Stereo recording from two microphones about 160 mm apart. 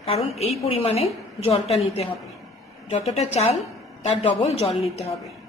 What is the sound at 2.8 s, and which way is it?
A woman's voice, 40° left (ahead or behind).